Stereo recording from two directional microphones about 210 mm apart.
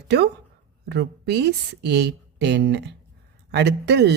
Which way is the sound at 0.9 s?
50° right (ahead or behind).